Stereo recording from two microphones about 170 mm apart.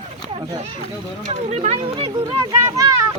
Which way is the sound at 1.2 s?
40° right (ahead or behind).